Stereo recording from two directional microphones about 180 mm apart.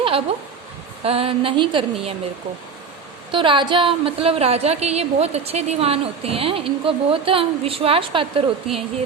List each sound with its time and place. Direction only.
0.0 s a woman's voice: 30° right (ahead or behind)
3.3 s a woman's voice: 30° right (ahead or behind)